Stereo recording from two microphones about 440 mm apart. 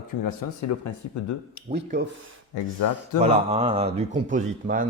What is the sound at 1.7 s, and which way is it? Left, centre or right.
Speech, centre.